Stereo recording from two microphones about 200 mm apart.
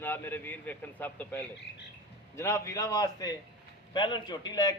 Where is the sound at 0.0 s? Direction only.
10° left (ahead or behind).